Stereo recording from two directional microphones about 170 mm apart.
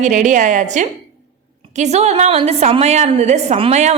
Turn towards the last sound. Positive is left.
turn(degrees=-40)  # may be behind; listen again after turning